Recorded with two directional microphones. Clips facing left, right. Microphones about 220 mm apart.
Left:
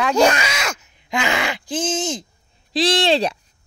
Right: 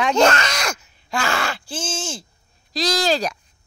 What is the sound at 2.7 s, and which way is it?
Speech, 30° left (ahead or behind).